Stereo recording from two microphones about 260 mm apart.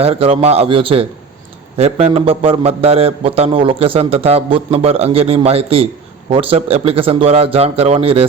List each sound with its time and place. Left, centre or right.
0.0 s a man's voice: right